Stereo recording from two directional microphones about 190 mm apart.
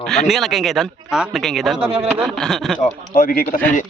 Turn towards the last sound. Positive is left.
turn(degrees=45)  # may be behind; listen again after turning